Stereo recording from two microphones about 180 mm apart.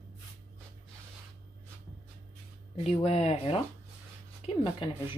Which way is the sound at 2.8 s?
35° left (ahead or behind).